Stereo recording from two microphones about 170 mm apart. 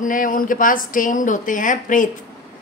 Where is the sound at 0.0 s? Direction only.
50° left (ahead or behind).